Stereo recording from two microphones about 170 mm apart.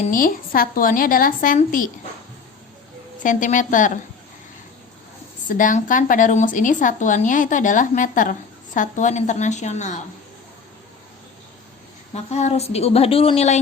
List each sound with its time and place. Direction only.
0.0 s speech: 55° left (ahead or behind)
3.2 s speech: 50° left (ahead or behind)
5.5 s speech: 50° left (ahead or behind)
12.1 s a woman's voice: 40° left (ahead or behind)